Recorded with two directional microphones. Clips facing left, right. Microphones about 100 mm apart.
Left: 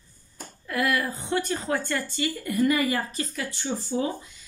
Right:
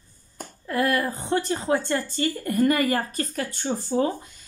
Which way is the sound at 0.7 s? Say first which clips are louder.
Right 2 dB; 35° right (ahead or behind).